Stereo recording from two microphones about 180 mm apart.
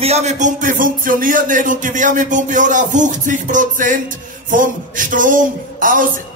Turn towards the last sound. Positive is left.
turn(degrees=-50)  # may be behind; listen again after turning